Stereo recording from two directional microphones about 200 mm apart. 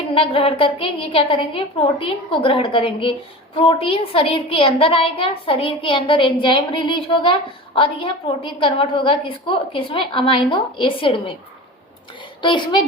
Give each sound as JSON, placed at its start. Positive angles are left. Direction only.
{"t": 0.1, "sound": "a woman's voice", "side_deg": 25}
{"t": 12.4, "sound": "a woman's voice", "side_deg": 25}